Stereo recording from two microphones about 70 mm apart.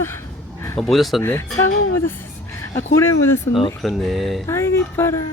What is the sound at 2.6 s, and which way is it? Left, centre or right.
Speech, left.